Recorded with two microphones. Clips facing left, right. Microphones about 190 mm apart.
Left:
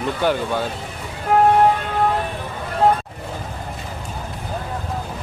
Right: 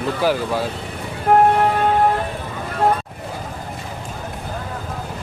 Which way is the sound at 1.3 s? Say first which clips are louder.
Right 3 dB; 55° right (ahead or behind).